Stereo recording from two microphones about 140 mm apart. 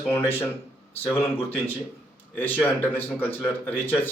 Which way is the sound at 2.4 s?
15° left (ahead or behind).